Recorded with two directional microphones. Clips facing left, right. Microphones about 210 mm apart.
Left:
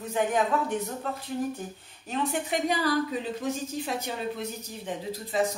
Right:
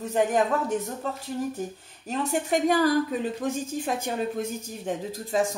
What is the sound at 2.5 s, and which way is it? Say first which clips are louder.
Speech: right 6 dB; 45° right (ahead or behind).